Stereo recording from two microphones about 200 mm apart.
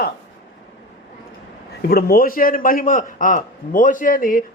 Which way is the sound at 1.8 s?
50° left (ahead or behind).